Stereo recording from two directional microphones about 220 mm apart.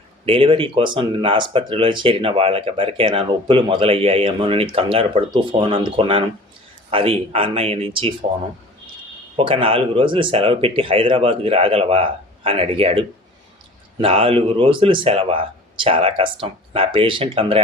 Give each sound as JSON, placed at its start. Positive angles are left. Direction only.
{"t": 0.3, "sound": "speech", "side_deg": -25}
{"t": 9.3, "sound": "speech", "side_deg": -25}